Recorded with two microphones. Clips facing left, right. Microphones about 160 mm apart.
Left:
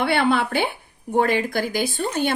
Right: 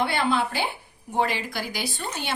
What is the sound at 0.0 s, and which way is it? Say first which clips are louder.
Speech: left 4 dB; 65° left (ahead or behind).